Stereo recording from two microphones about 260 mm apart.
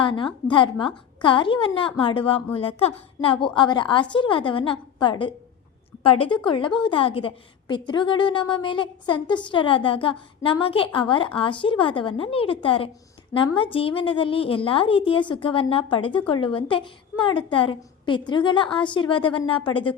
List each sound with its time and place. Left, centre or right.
0.0 s a woman's voice: centre